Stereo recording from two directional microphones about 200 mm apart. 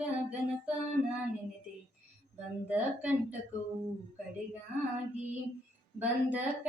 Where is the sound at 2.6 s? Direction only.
5° right (ahead or behind).